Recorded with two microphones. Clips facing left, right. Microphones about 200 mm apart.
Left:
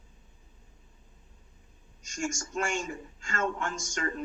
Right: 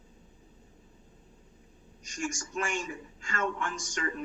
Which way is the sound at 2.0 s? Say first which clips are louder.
Left 2 dB; 45° left (ahead or behind).